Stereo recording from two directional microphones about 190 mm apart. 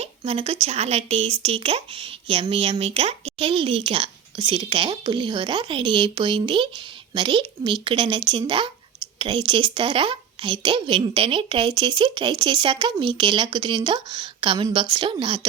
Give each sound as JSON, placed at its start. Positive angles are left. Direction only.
{"t": 0.0, "sound": "speech", "side_deg": -35}